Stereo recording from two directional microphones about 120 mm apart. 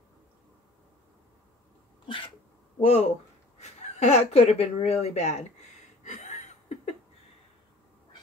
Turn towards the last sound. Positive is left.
turn(degrees=75)  # may be behind; listen again after turning